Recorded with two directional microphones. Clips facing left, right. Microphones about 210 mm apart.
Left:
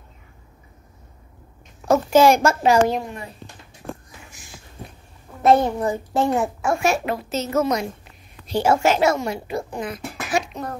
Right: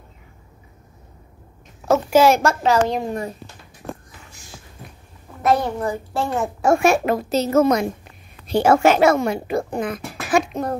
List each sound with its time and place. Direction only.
1.9 s a woman's voice: 5° right (ahead or behind)
2.6 s a woman's voice: 10° left (ahead or behind)
5.4 s a child's voice: 25° left (ahead or behind)
6.6 s a child's voice: 50° right (ahead or behind)
7.5 s a child's voice: 50° right (ahead or behind)